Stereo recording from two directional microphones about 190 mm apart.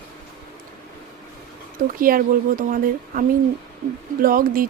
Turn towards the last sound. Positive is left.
turn(degrees=-50)  # may be behind; listen again after turning